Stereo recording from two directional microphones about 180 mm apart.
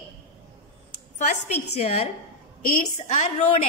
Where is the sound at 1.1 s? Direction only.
40° left (ahead or behind).